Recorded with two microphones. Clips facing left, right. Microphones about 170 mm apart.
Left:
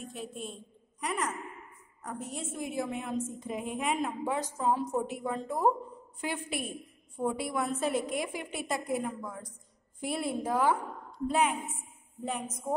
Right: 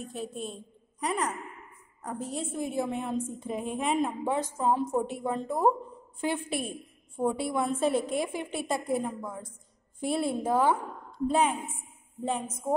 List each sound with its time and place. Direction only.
0.0 s a woman's voice: 40° right (ahead or behind)